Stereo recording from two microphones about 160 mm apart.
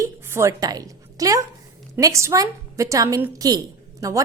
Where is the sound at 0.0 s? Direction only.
20° right (ahead or behind).